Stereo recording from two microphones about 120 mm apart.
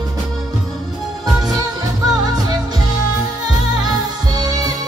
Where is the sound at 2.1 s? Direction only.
30° right (ahead or behind).